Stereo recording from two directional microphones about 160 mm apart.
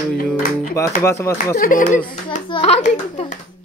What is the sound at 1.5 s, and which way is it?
Speech, 60° left (ahead or behind).